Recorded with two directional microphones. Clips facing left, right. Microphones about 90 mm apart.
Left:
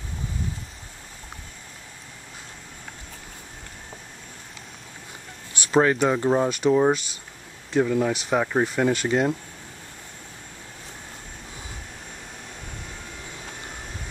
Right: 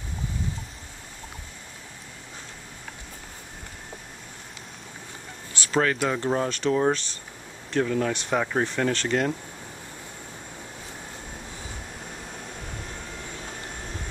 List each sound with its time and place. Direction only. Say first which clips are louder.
5.7 s speech: left 4 dB; 20° left (ahead or behind)